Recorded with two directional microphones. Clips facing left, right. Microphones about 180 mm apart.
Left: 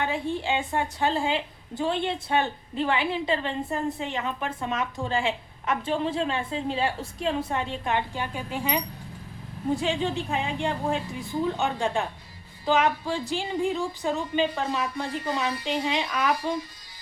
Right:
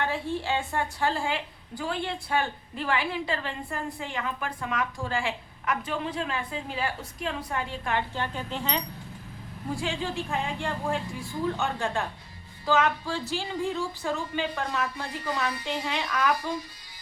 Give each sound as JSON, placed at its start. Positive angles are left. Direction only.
{"t": 0.0, "sound": "a woman's voice", "side_deg": 20}